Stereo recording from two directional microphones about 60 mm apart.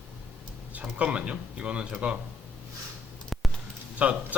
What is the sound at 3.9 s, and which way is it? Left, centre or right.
Speech, right.